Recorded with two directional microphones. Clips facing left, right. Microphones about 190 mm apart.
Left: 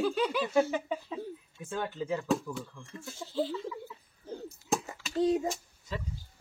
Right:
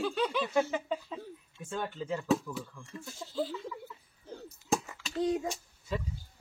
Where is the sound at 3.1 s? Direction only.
25° left (ahead or behind).